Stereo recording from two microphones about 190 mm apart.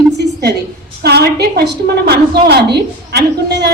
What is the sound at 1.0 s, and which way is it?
A woman's voice, 60° right (ahead or behind).